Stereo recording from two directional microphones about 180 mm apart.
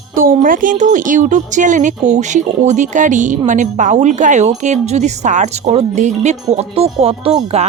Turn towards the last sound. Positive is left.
turn(degrees=-35)  # may be behind; listen again after turning